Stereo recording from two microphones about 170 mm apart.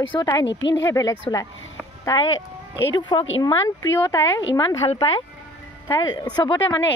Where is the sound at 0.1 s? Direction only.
25° left (ahead or behind).